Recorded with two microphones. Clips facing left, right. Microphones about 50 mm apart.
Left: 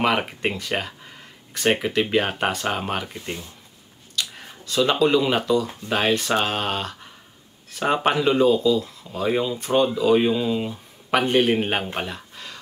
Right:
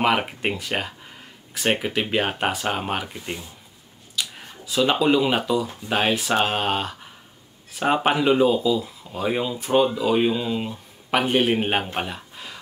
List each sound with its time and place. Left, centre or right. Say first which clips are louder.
0.0 s a man's voice: even; centre